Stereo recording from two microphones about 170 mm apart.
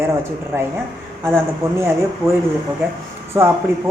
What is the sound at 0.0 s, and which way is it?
Speech, 15° right (ahead or behind).